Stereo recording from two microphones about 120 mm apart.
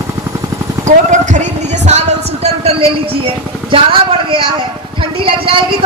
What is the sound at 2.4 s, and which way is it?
A woman's voice, 55° right (ahead or behind).